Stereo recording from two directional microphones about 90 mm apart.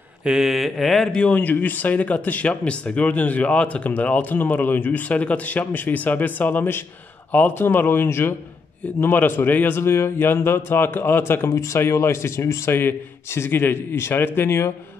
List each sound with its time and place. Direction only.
0.2 s speech: 5° right (ahead or behind)
1.3 s a man's voice: 20° left (ahead or behind)